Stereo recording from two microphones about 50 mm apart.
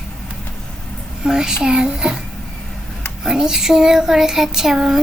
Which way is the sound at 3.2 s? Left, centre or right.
Centre.